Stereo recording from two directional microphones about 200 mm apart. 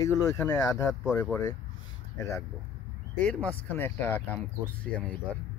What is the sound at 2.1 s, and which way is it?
Speech, 15° left (ahead or behind).